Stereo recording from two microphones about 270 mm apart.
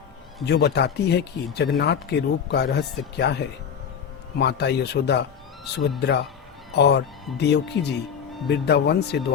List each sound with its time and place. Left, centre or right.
0.4 s speech: left